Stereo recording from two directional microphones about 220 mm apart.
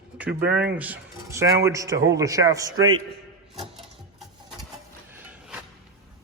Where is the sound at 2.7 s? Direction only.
65° right (ahead or behind).